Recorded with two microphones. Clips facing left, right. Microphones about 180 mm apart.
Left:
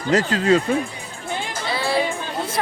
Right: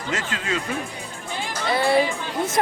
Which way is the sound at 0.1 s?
35° left (ahead or behind).